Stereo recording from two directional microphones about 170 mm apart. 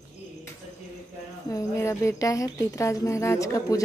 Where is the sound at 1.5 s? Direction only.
15° left (ahead or behind).